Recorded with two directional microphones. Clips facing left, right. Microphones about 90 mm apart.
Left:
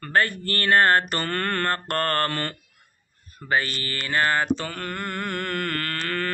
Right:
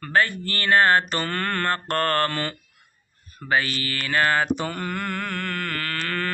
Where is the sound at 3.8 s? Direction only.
30° left (ahead or behind).